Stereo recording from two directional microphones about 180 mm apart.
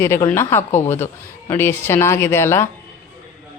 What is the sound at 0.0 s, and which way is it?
A man's voice, 15° left (ahead or behind).